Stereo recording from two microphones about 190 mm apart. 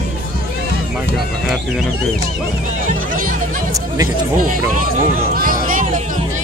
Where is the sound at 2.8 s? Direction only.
45° right (ahead or behind).